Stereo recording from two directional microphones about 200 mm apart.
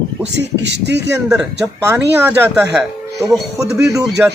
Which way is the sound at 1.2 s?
5° right (ahead or behind).